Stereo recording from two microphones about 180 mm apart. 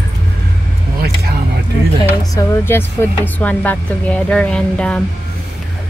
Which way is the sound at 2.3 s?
15° left (ahead or behind).